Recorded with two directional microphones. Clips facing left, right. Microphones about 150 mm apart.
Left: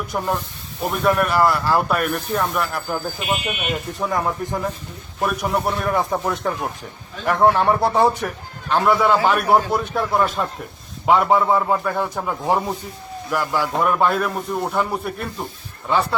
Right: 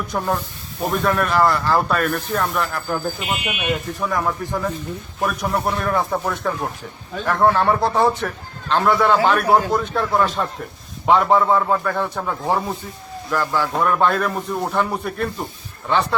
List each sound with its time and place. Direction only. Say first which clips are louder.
0.1 s speech: right 1 dB; 10° left (ahead or behind)
4.0 s speech: left 2 dB; 20° left (ahead or behind)
5.2 s a man's voice: left 1 dB; 5° left (ahead or behind)